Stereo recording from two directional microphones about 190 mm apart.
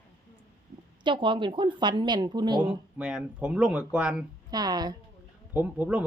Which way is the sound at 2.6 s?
5° right (ahead or behind).